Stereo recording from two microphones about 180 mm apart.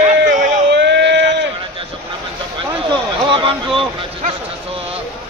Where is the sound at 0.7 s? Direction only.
75° right (ahead or behind).